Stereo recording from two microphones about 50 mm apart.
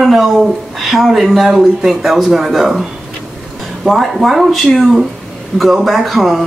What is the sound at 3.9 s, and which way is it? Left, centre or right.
Speech, centre.